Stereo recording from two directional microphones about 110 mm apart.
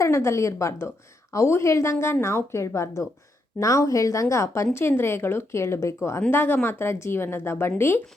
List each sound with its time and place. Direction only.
0.0 s a woman's voice: 25° left (ahead or behind)